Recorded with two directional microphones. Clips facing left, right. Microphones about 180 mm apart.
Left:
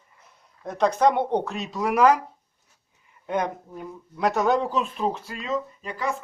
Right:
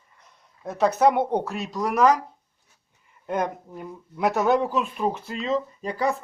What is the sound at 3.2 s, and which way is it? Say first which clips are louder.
Speech: even; centre (ahead or behind).